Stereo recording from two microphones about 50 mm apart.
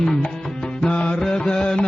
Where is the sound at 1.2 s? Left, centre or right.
Centre.